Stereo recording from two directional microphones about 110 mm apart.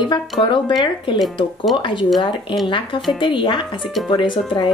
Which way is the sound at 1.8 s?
50° left (ahead or behind).